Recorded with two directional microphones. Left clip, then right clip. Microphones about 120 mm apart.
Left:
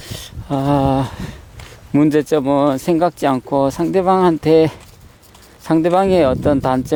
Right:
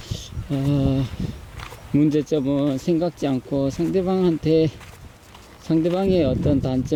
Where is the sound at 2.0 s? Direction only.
25° left (ahead or behind).